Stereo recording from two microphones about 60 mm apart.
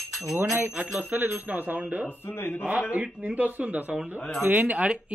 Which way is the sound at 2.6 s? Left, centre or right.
Centre.